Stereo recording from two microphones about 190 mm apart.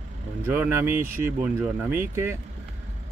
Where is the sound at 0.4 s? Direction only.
10° right (ahead or behind).